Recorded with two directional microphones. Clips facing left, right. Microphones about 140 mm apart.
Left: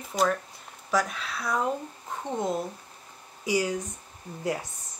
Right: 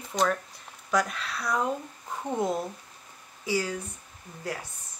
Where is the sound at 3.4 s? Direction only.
15° left (ahead or behind).